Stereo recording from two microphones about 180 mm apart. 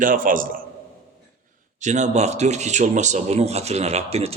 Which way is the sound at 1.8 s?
40° right (ahead or behind).